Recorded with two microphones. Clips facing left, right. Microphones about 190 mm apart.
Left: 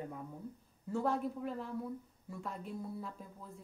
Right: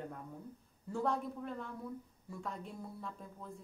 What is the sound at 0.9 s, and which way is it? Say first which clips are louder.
Speech: left 2 dB; 5° left (ahead or behind).